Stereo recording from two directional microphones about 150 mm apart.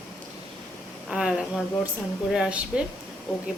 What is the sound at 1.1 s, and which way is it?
Speech, 5° right (ahead or behind).